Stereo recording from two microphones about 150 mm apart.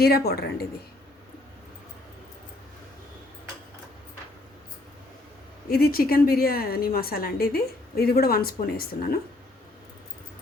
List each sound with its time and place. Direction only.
0.0 s a woman's voice: 90° left
5.6 s a woman's voice: 80° left